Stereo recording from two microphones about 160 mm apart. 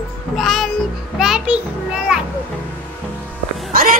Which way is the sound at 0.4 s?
Centre (ahead or behind).